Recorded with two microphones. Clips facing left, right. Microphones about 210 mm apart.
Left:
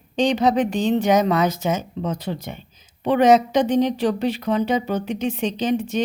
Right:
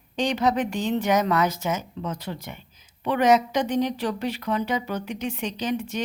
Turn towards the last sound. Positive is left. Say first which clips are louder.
# left 6 dB
turn(degrees=25)  # may be behind; listen again after turning